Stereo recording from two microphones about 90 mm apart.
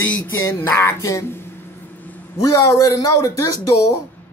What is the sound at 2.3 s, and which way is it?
Speech, 40° left (ahead or behind).